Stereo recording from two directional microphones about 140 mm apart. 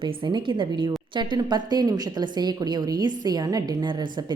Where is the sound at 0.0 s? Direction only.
35° right (ahead or behind).